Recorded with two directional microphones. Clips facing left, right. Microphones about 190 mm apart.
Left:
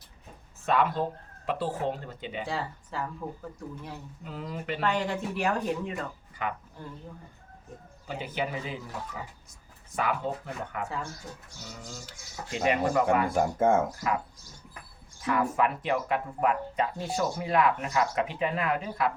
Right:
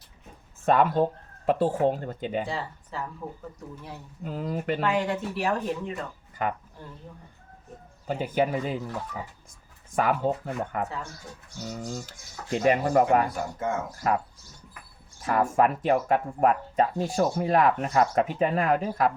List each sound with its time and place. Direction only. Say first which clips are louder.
0.6 s speech: right 5 dB; 50° right (ahead or behind)
2.5 s speech: even; centre (ahead or behind)
4.2 s speech: right 8 dB; 45° right (ahead or behind)
4.8 s speech: left 1 dB; centre (ahead or behind)
6.4 s speech: right 4 dB; 45° right (ahead or behind)
8.0 s speech: right 7 dB; 50° right (ahead or behind)
9.9 s speech: right 5 dB; 45° right (ahead or behind)
13.3 s speech: left 6 dB; 50° left (ahead or behind)
15.2 s speech: right 4 dB; 45° right (ahead or behind)